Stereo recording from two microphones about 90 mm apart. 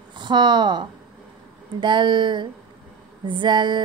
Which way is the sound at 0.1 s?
60° right (ahead or behind).